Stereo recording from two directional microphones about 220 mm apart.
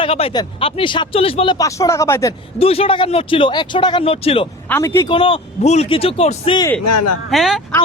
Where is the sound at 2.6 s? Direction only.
25° left (ahead or behind).